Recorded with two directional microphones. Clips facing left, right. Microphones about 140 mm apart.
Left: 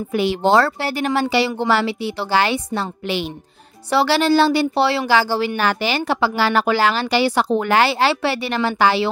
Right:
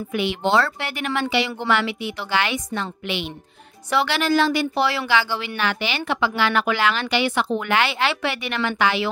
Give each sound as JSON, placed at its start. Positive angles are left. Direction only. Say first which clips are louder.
{"t": 0.1, "sound": "speech", "louder": "left 5 dB", "side_deg": 35}